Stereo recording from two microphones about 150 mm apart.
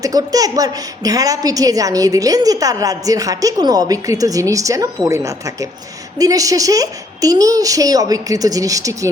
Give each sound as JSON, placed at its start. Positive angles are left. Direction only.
{"t": 0.0, "sound": "a woman's voice", "side_deg": -25}